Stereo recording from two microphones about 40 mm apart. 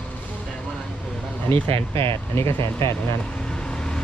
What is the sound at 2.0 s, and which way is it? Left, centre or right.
Speech, left.